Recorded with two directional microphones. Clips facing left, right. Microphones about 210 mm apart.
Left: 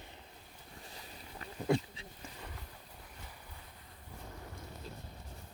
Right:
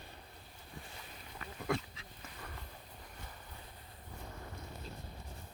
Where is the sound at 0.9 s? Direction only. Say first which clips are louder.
Left 1 dB; 30° left (ahead or behind).